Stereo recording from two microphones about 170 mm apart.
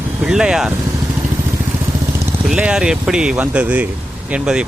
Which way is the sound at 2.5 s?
5° right (ahead or behind).